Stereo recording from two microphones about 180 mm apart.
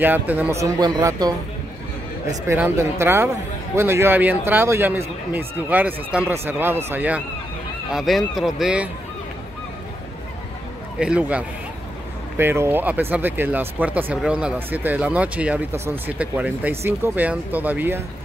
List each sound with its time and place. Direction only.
0.0 s speech: 10° right (ahead or behind)
11.0 s speech: 5° right (ahead or behind)